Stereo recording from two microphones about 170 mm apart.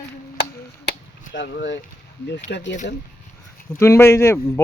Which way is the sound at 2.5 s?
90° left.